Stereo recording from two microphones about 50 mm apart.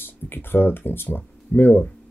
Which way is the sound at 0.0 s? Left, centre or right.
Left.